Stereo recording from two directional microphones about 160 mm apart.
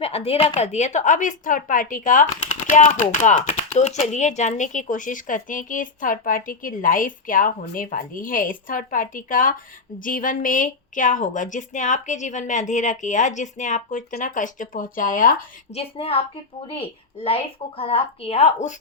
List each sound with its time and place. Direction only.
0.0 s a woman's voice: 40° left (ahead or behind); by 15.4 s 60° left (ahead or behind)
15.7 s a woman's voice: 35° left (ahead or behind)